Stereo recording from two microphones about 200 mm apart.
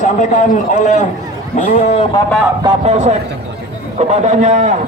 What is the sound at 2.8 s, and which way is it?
A man's voice, 35° right (ahead or behind).